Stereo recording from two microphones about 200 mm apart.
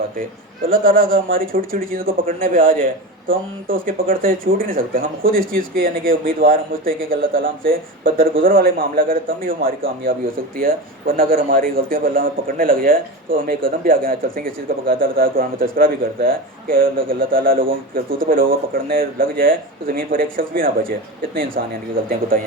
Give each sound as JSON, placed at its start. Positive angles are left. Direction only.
{"t": 0.7, "sound": "a man's voice", "side_deg": -45}